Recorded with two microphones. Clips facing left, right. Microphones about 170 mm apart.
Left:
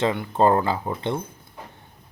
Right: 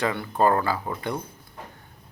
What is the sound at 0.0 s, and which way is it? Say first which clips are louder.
Speech: left 3 dB; 20° left (ahead or behind).